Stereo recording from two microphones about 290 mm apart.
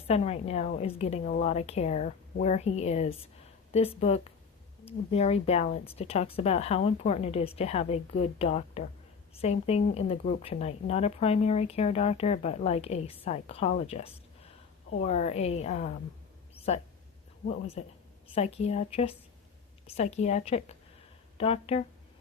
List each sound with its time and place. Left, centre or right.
0.1 s speech: left
16.6 s a sound: left
17.8 s speech: left